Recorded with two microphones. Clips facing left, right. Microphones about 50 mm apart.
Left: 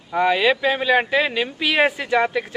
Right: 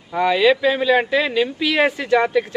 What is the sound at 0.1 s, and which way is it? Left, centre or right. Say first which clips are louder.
A man's voice: right 2 dB; centre.